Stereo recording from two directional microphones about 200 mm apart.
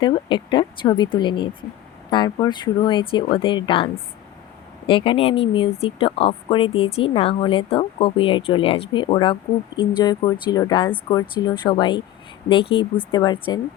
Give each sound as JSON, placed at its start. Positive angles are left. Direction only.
{"t": 0.0, "sound": "speech", "side_deg": 25}
{"t": 4.9, "sound": "speech", "side_deg": 25}